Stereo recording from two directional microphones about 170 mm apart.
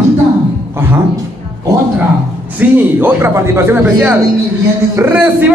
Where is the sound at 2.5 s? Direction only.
10° right (ahead or behind).